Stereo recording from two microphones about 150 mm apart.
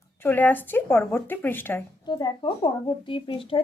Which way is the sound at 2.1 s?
30° left (ahead or behind).